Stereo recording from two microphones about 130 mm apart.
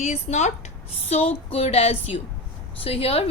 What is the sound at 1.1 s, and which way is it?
A woman's voice, 50° left (ahead or behind).